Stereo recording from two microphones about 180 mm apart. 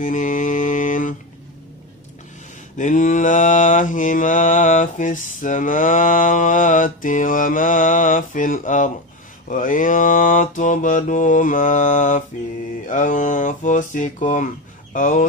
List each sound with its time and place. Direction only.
0.0 s mantra: 45° left (ahead or behind)
2.8 s mantra: 45° left (ahead or behind)